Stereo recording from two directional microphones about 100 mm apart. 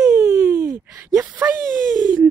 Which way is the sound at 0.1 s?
25° right (ahead or behind).